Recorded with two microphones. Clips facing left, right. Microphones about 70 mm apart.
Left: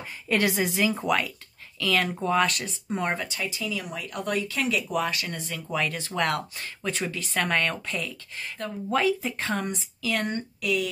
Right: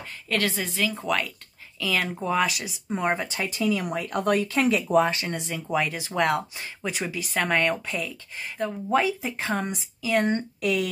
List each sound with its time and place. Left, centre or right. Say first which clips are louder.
0.0 s a woman's voice: left 2 dB; centre
1.0 s speech: left 1 dB; centre
3.4 s speech: right 6 dB; right; by 9.8 s centre
10.0 s speech: right 5 dB; centre
10.6 s speech: even; right